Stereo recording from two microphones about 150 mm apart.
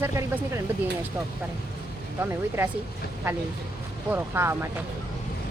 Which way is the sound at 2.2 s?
15° right (ahead or behind).